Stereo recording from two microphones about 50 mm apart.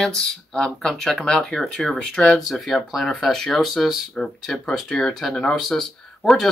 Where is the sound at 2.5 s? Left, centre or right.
Centre.